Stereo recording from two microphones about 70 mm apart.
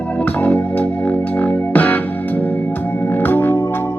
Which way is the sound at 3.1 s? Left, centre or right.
Left.